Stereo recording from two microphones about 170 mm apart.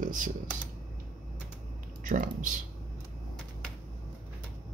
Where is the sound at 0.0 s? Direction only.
50° right (ahead or behind).